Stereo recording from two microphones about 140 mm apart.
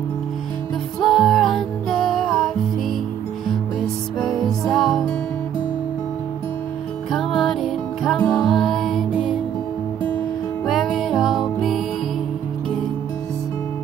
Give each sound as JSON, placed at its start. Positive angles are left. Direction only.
{"t": 1.0, "sound": "music", "side_deg": 0}
{"t": 7.1, "sound": "music", "side_deg": 0}
{"t": 10.7, "sound": "music", "side_deg": 0}